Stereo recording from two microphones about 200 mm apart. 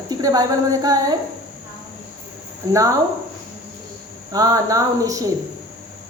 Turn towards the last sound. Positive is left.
turn(degrees=-15)  # may be behind; listen again after turning